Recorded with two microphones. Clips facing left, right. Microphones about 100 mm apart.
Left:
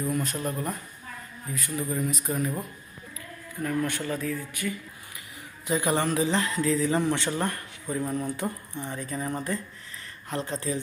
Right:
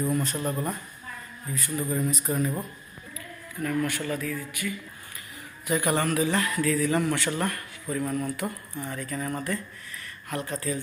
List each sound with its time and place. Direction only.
0.1 s speech: centre (ahead or behind)
3.6 s a man's voice: 25° left (ahead or behind)
5.6 s a man's voice: 20° left (ahead or behind)